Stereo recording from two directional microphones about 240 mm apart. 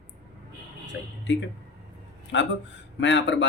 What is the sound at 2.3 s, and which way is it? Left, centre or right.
Speech, left.